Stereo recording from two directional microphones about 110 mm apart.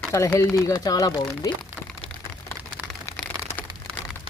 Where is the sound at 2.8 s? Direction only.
15° right (ahead or behind).